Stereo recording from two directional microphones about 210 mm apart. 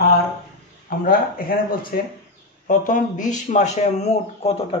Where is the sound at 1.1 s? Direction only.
45° left (ahead or behind).